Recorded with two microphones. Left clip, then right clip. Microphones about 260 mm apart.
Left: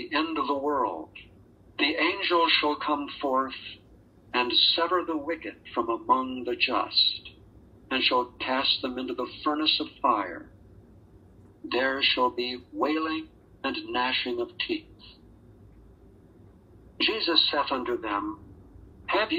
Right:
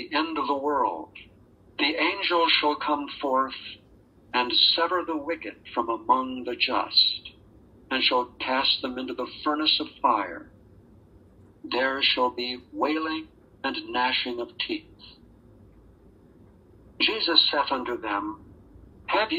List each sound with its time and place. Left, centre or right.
0.0 s a man's voice: right
11.6 s a man's voice: right
17.3 s a man's voice: right